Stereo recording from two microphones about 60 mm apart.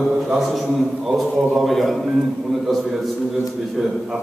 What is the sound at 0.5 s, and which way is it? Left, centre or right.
A man's voice, centre.